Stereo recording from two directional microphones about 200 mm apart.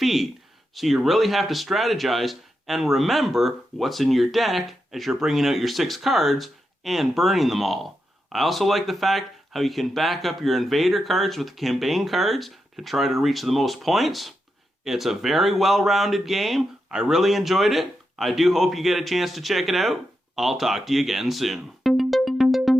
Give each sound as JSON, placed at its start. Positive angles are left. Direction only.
{"t": 0.0, "sound": "speech", "side_deg": 0}